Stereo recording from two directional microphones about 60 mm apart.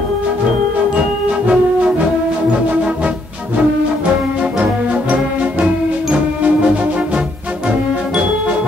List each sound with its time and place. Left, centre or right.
1.5 s music: centre
4.4 s music: right